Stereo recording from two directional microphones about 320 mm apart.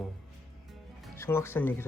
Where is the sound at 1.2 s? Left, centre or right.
Centre.